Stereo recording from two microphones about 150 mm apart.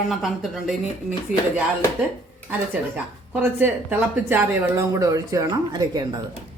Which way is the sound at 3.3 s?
15° right (ahead or behind).